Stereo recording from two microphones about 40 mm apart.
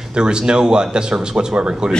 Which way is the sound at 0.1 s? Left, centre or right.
Right.